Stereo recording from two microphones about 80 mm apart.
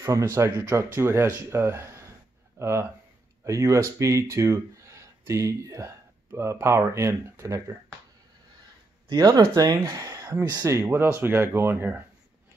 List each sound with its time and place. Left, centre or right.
0.0 s speech: right
9.1 s speech: right
10.7 s speech: right